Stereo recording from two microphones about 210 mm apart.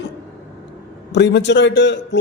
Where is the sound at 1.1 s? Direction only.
55° left (ahead or behind).